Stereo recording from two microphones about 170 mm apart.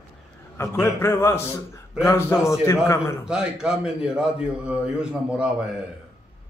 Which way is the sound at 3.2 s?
5° right (ahead or behind).